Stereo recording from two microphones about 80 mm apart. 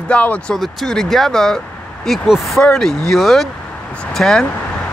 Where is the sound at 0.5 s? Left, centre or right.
Centre.